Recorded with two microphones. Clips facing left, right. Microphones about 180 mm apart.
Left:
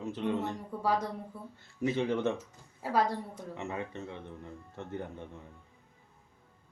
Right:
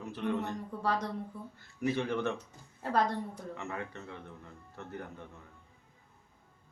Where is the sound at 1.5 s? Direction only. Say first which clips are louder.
Left 2 dB; 25° left (ahead or behind).